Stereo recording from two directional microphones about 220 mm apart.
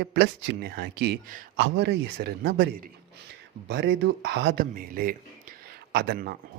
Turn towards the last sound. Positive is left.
turn(degrees=-45)  # may be behind; listen again after turning